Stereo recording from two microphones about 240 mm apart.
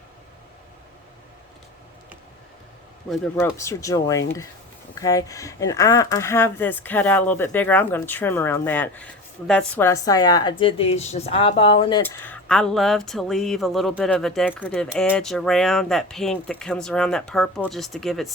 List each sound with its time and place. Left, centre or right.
3.1 s a woman's voice: centre
12.0 s speech: centre